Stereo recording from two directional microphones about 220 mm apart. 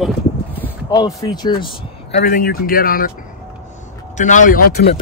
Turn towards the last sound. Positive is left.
turn(degrees=45)  # may be behind; listen again after turning